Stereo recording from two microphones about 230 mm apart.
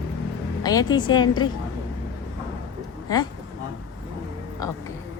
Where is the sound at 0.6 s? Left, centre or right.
Centre.